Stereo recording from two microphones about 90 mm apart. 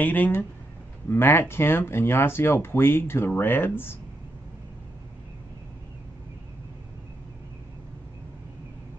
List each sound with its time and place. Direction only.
0.0 s speech: 20° left (ahead or behind)